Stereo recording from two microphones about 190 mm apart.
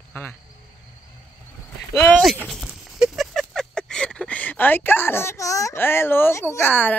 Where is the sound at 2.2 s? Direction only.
Centre (ahead or behind).